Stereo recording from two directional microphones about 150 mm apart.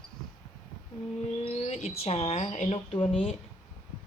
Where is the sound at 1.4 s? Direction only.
45° left (ahead or behind).